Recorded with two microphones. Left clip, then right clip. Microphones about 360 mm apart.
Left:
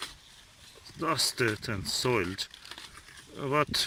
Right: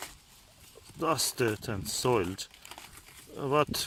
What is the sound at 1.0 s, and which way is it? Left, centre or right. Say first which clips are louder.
Speech: left 1 dB; centre.